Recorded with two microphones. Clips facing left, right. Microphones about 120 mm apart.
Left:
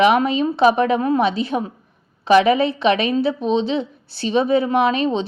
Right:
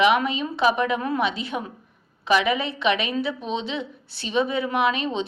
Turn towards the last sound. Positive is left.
turn(degrees=35)  # may be behind; listen again after turning